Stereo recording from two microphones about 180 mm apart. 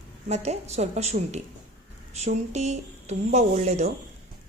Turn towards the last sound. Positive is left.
turn(degrees=-40)  # may be behind; listen again after turning